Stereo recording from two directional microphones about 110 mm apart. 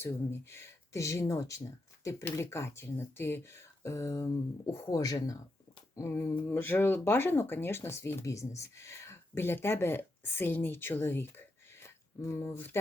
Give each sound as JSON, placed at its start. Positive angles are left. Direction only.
{"t": 0.0, "sound": "speech", "side_deg": 20}